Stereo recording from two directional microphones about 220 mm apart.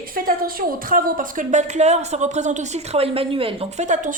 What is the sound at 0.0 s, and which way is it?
Speech, 40° right (ahead or behind).